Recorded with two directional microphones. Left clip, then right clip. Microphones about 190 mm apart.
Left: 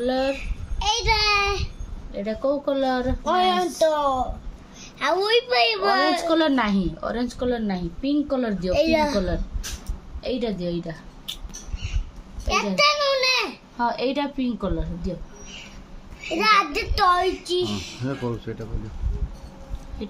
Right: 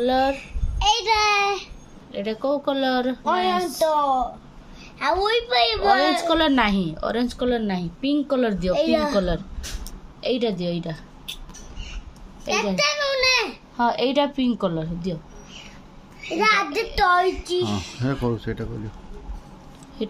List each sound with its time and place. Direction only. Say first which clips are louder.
0.0 s a child's voice: right 3 dB; 40° right (ahead or behind)
0.7 s child singing: right 2 dB; centre (ahead or behind)
2.1 s a woman's voice: even; 40° right (ahead or behind)
3.3 s a woman's voice: left 2 dB; 10° left (ahead or behind)
6.2 s a woman's voice: right 1 dB; 40° right (ahead or behind)
8.7 s a child's voice: left 2 dB; centre (ahead or behind)
10.2 s a woman's voice: right 3 dB; 45° right (ahead or behind)
12.4 s a sound: left 2 dB; centre (ahead or behind)
13.7 s a woman's voice: right 4 dB; 45° right (ahead or behind)
16.3 s a child's voice: left 1 dB; centre (ahead or behind)
17.6 s speech: right 2 dB; 25° right (ahead or behind)